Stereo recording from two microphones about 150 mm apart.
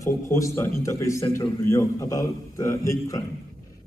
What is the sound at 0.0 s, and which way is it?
A man's voice, 20° left (ahead or behind).